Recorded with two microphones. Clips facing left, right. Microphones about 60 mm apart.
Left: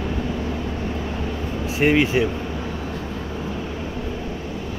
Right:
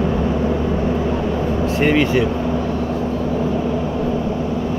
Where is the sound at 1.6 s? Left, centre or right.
Centre.